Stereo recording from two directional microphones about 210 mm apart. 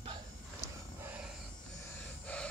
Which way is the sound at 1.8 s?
10° left (ahead or behind).